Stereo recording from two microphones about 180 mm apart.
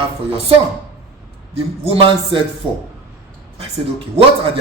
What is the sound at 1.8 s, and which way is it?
Speech, 30° right (ahead or behind).